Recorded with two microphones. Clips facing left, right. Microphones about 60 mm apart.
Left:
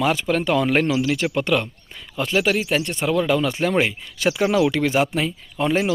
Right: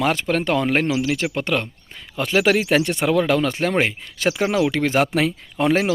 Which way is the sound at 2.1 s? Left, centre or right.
Right.